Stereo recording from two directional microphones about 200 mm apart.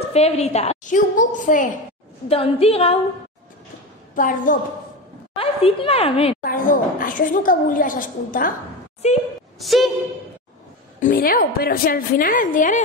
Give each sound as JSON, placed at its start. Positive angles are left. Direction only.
{"t": 0.1, "sound": "a woman's voice", "side_deg": 30}
{"t": 2.2, "sound": "speech", "side_deg": 30}
{"t": 4.1, "sound": "a woman's voice", "side_deg": 40}
{"t": 5.3, "sound": "speech", "side_deg": 30}
{"t": 6.4, "sound": "a woman's voice", "side_deg": 45}
{"t": 9.6, "sound": "a woman's voice", "side_deg": 0}
{"t": 11.0, "sound": "a woman's voice", "side_deg": 45}